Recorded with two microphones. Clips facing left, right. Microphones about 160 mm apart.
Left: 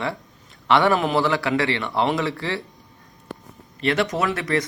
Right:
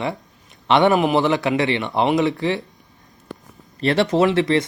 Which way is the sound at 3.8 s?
30° right (ahead or behind).